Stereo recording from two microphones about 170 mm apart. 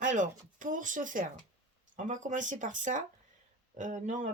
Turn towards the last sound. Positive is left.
turn(degrees=-45)  # may be behind; listen again after turning